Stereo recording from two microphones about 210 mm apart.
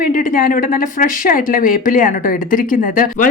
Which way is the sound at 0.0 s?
40° left (ahead or behind).